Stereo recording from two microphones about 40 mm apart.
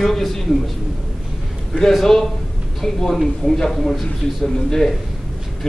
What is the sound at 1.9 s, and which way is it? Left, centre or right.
A man's voice, centre.